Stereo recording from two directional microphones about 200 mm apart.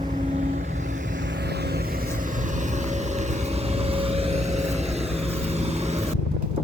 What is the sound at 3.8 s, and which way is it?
Vehicle, 30° right (ahead or behind).